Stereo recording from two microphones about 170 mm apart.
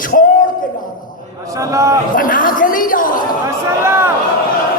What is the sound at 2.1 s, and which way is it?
A man's voice, 55° left (ahead or behind).